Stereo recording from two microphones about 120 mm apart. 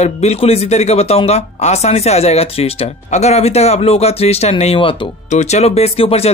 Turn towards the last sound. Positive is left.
turn(degrees=55)  # may be behind; listen again after turning